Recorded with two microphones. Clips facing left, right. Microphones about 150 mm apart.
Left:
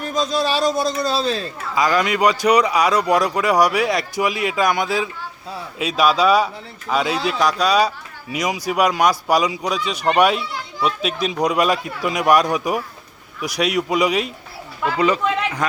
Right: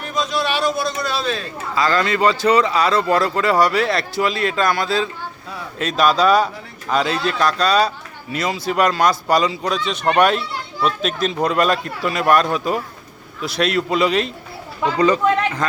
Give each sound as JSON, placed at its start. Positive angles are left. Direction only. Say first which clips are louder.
{"t": 0.0, "sound": "a man's voice", "louder": "left 1 dB", "side_deg": 40}
{"t": 1.7, "sound": "speech", "louder": "even", "side_deg": 15}